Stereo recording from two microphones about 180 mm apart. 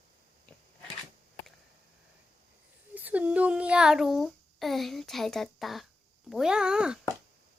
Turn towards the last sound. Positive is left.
turn(degrees=-5)  # may be behind; listen again after turning